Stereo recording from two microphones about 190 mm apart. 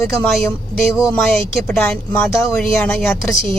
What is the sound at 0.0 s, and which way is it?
Speech, centre (ahead or behind).